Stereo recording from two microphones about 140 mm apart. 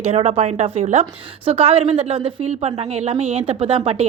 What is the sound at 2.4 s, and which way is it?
A woman's voice, 50° right (ahead or behind).